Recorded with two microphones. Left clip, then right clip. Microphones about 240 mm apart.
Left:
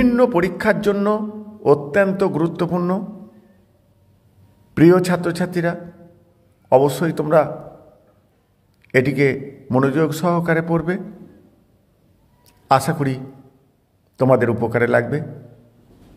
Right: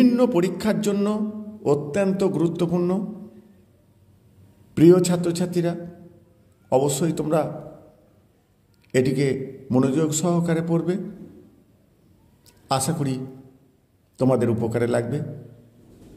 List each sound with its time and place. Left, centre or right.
0.0 s a man's voice: left
4.7 s a man's voice: left
8.9 s a man's voice: left
12.6 s a man's voice: left